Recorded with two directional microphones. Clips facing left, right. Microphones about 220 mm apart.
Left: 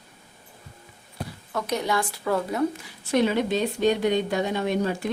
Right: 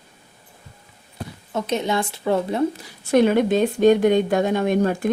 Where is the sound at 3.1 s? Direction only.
50° right (ahead or behind).